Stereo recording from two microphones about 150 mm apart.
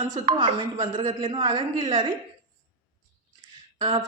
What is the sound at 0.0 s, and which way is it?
A woman's voice, 35° right (ahead or behind).